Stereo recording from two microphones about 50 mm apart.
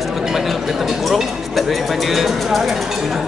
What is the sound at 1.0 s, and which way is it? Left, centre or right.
Speech, centre.